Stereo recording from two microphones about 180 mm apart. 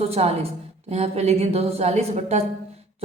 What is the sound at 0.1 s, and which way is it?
A woman's voice, 35° right (ahead or behind).